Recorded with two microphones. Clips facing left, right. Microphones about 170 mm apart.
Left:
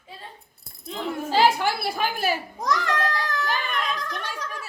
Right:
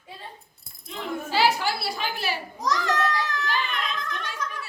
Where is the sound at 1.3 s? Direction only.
50° left (ahead or behind).